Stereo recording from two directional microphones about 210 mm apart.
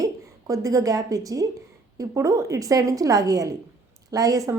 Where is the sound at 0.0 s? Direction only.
15° right (ahead or behind).